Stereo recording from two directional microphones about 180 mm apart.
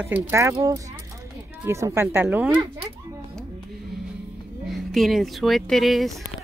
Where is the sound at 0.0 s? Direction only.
15° right (ahead or behind).